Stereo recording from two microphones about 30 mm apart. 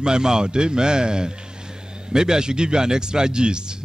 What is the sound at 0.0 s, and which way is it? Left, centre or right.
A man's voice, right.